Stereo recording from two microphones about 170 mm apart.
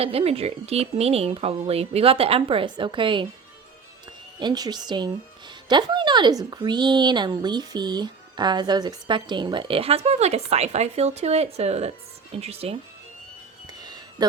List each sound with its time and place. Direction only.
0.0 s speech: 35° right (ahead or behind)
4.4 s speech: 25° right (ahead or behind)
13.7 s music: 25° right (ahead or behind)